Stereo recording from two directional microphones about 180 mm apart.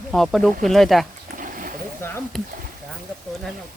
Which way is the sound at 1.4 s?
50° right (ahead or behind).